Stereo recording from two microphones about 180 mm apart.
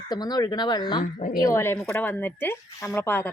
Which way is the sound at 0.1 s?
20° left (ahead or behind).